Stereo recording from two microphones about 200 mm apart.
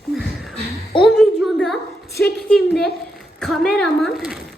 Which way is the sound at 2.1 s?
55° left (ahead or behind).